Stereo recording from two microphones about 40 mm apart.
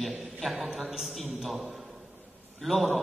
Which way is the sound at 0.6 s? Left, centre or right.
Centre.